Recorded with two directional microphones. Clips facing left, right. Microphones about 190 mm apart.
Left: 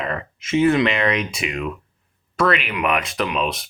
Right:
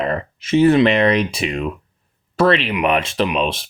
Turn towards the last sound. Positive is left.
turn(degrees=-30)  # may be behind; listen again after turning